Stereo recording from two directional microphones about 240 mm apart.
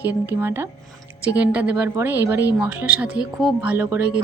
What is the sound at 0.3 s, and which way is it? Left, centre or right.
Speech, centre.